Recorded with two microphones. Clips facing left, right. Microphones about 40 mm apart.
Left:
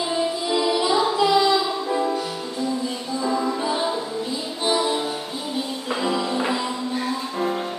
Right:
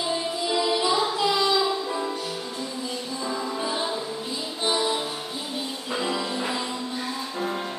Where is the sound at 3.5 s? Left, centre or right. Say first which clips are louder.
Left 4 dB; centre.